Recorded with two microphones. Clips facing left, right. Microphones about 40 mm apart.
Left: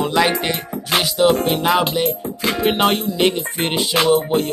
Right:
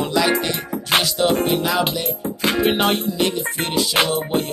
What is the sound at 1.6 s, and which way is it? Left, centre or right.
Music, left.